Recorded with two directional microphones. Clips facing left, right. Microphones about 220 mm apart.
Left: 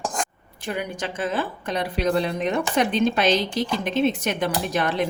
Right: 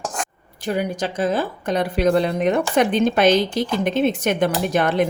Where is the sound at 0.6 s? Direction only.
40° right (ahead or behind).